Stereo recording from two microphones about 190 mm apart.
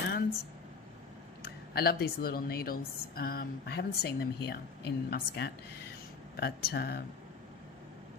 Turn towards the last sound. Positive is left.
turn(degrees=55)  # may be behind; listen again after turning